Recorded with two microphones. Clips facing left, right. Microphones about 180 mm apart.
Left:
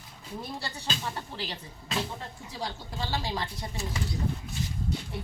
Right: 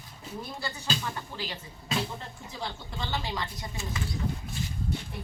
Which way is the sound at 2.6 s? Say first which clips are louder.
Left 1 dB; 35° left (ahead or behind).